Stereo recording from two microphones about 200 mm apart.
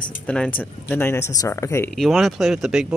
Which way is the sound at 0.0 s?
5° left (ahead or behind).